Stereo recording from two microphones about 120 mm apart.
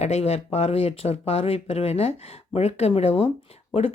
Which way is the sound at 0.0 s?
60° left (ahead or behind).